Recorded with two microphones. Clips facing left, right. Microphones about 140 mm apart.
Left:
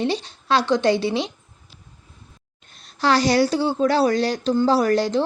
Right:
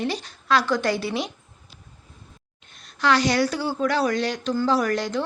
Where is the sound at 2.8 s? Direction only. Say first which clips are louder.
Left 2 dB; 35° left (ahead or behind).